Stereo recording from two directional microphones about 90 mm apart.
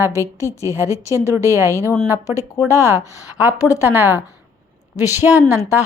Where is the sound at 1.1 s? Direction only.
30° right (ahead or behind).